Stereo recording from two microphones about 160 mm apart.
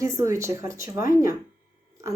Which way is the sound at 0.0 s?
20° right (ahead or behind).